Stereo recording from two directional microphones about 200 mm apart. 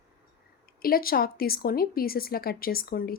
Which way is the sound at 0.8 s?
45° left (ahead or behind).